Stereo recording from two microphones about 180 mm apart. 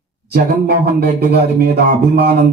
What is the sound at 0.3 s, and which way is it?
Speech, 60° right (ahead or behind).